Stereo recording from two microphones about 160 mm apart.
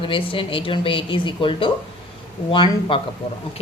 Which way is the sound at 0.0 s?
35° left (ahead or behind).